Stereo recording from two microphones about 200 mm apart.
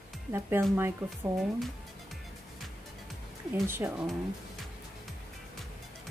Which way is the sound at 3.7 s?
10° right (ahead or behind).